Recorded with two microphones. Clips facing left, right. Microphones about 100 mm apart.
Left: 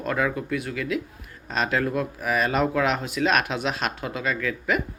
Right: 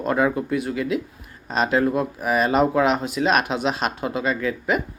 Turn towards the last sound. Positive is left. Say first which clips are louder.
# right 3 dB
turn(degrees=-25)  # may be behind; listen again after turning